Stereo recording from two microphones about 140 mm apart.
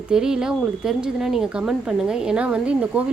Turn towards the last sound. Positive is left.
turn(degrees=-10)  # may be behind; listen again after turning